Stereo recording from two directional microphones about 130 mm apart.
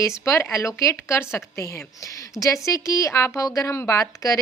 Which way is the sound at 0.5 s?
20° left (ahead or behind).